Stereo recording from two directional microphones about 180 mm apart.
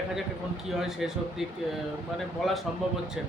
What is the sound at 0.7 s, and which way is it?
Speech, centre (ahead or behind).